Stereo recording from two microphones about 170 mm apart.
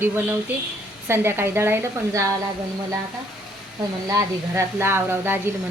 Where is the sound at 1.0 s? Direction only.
15° right (ahead or behind).